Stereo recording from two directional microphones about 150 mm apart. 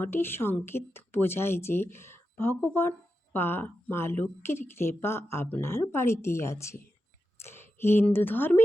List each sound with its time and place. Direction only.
0.0 s a woman's voice: 15° left (ahead or behind)